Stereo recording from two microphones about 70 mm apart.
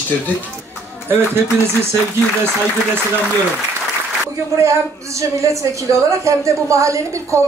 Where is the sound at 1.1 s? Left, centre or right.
Right.